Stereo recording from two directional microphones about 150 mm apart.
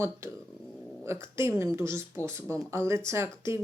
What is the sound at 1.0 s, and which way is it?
Speech, 20° right (ahead or behind).